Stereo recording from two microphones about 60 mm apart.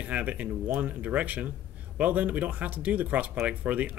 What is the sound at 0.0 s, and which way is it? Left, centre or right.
Speech, right.